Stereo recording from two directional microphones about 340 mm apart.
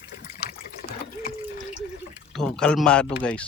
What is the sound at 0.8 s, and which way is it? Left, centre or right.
Water, left.